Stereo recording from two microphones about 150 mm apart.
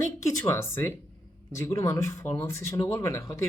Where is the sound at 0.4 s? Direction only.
20° left (ahead or behind).